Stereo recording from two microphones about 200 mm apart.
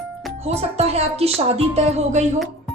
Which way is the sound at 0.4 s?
30° right (ahead or behind).